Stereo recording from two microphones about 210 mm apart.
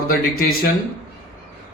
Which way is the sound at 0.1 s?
45° left (ahead or behind).